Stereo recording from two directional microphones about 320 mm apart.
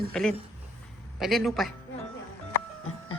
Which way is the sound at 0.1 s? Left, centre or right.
Centre.